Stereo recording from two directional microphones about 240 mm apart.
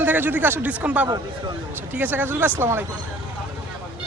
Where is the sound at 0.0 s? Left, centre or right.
Centre.